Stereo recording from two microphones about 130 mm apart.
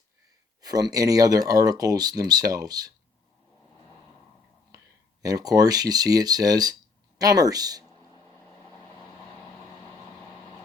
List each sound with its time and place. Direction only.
0.6 s speech: 30° right (ahead or behind)
5.2 s speech: 30° right (ahead or behind)